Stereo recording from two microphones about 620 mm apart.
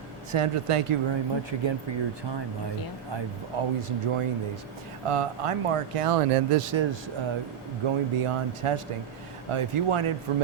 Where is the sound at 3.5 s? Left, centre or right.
Right.